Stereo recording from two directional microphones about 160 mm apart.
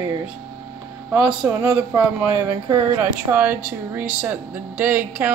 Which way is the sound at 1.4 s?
15° right (ahead or behind).